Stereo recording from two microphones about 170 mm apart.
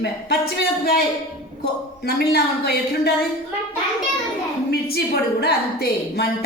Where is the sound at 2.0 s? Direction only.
70° left (ahead or behind).